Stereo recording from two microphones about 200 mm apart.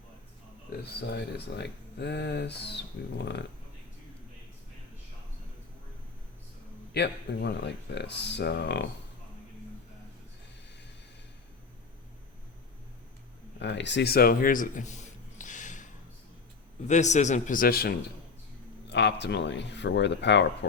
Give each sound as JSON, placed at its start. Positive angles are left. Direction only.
{"t": 1.1, "sound": "speech", "side_deg": 55}
{"t": 6.9, "sound": "speech", "side_deg": 55}
{"t": 13.6, "sound": "a man's voice", "side_deg": 60}
{"t": 15.4, "sound": "a sound", "side_deg": 40}
{"t": 16.8, "sound": "a man's voice", "side_deg": 35}